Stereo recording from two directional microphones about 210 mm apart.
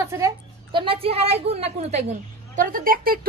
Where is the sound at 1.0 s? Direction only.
30° right (ahead or behind).